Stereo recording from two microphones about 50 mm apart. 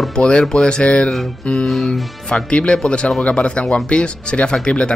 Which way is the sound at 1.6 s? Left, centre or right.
Centre.